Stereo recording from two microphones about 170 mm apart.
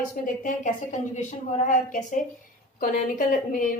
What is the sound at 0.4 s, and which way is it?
A woman's voice, 45° left (ahead or behind).